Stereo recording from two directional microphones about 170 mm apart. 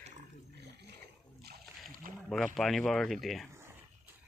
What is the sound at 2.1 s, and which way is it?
Rowboat, 55° right (ahead or behind).